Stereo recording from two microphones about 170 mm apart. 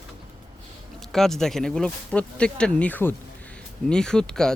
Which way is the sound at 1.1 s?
Centre (ahead or behind).